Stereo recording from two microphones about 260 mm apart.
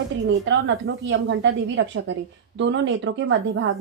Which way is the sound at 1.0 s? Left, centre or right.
Right.